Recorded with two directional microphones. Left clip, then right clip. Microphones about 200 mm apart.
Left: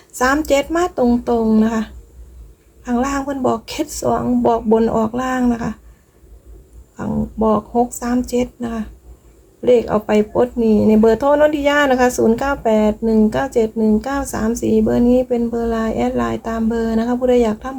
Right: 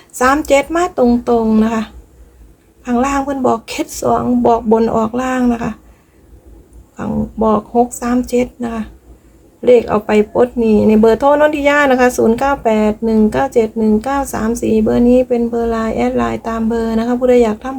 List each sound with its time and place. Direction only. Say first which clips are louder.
0.2 s speech: right 4 dB; centre (ahead or behind)
6.9 s speech: right 3 dB; centre (ahead or behind)